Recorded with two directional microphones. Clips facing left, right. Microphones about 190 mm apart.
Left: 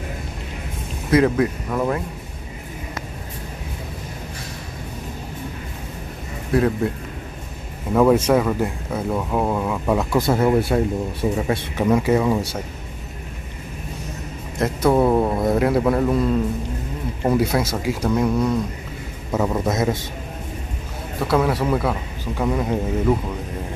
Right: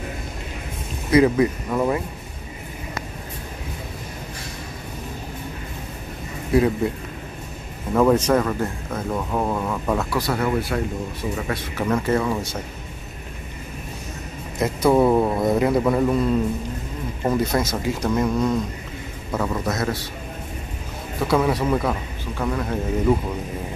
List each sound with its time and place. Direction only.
1.1 s speech: centre (ahead or behind)
6.5 s speech: centre (ahead or behind)
7.9 s speech: 5° left (ahead or behind)
10.1 s a man's voice: 25° left (ahead or behind)
14.6 s speech: centre (ahead or behind)
17.3 s speech: 10° left (ahead or behind)
19.3 s a man's voice: 20° left (ahead or behind)
21.2 s speech: centre (ahead or behind)
22.4 s speech: 15° left (ahead or behind)